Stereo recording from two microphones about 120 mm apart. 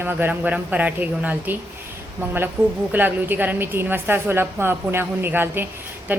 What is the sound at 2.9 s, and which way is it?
A woman's voice, 15° right (ahead or behind).